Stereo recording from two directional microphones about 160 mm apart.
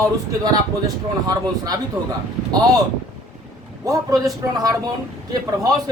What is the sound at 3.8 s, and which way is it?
Speech, 20° right (ahead or behind).